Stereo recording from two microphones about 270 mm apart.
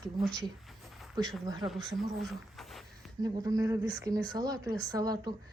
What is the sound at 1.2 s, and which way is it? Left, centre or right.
Speech, centre.